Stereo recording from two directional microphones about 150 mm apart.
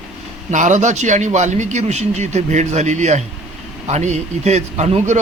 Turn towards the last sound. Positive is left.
turn(degrees=-50)  # may be behind; listen again after turning